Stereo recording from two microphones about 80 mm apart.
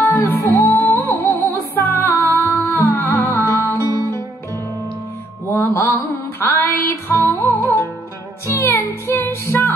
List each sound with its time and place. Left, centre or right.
0.0 s music: left
5.5 s mantra: left
7.1 s music: left